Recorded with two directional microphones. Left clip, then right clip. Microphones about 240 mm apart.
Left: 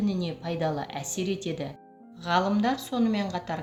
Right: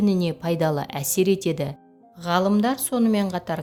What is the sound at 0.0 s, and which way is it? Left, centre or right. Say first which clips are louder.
Speech: right 8 dB; right.